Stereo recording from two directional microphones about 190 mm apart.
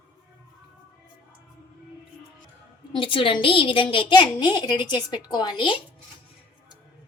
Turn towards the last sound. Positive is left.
turn(degrees=25)  # may be behind; listen again after turning